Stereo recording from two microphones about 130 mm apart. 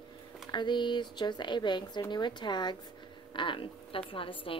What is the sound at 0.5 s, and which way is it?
A woman's voice, 35° left (ahead or behind).